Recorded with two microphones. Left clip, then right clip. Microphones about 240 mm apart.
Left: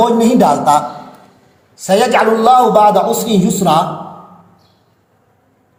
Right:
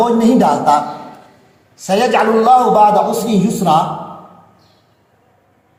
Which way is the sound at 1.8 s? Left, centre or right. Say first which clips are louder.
Left 2 dB; left.